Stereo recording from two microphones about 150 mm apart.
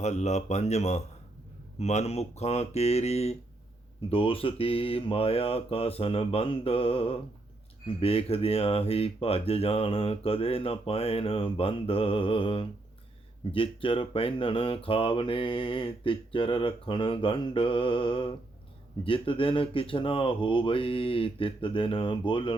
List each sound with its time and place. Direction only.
0.0 s speech: 50° left (ahead or behind); by 22.5 s 35° left (ahead or behind)